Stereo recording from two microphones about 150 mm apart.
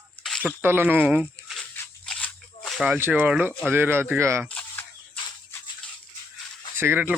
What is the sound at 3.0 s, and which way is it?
Speech, 15° right (ahead or behind).